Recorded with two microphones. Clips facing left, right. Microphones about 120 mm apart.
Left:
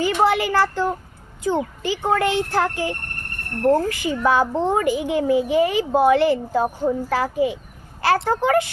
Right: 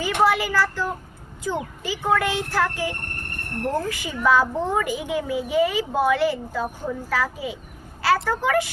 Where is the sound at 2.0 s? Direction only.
45° left (ahead or behind).